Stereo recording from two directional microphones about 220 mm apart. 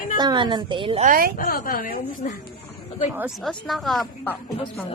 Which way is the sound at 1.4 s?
40° left (ahead or behind).